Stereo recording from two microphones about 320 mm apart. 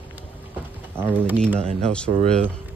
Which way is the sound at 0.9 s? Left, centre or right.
Centre.